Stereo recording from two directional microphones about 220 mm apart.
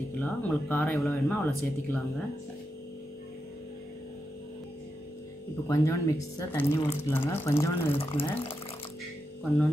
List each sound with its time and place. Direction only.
0.2 s speech: 5° left (ahead or behind)
5.7 s speech: 15° left (ahead or behind)
8.0 s speech: 25° left (ahead or behind)